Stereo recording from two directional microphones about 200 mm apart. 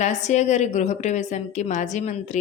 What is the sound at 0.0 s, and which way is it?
A woman's voice, 35° left (ahead or behind).